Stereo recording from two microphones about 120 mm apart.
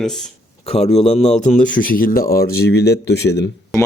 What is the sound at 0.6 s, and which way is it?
A man's voice, 60° left (ahead or behind).